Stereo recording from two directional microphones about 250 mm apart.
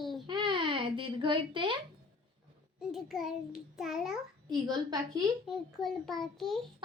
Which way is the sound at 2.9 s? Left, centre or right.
Centre.